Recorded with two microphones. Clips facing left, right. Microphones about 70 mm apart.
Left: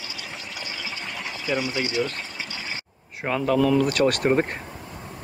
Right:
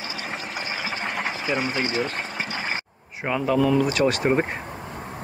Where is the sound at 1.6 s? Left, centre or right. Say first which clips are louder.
Left 1 dB; right.